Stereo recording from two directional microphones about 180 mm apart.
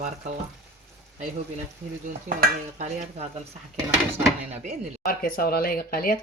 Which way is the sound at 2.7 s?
35° right (ahead or behind).